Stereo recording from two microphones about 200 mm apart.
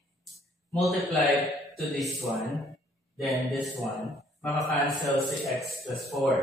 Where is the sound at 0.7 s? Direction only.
Centre (ahead or behind).